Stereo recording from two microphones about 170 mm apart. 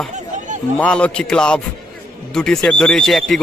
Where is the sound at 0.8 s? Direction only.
5° left (ahead or behind).